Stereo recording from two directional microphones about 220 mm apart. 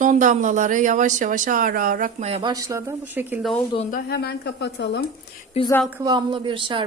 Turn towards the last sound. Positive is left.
turn(degrees=-20)  # may be behind; listen again after turning